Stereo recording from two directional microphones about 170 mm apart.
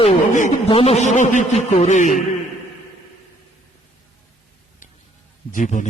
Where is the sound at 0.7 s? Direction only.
35° left (ahead or behind).